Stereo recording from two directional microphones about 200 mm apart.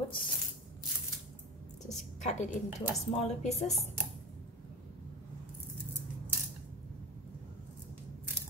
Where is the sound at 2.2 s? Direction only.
35° left (ahead or behind).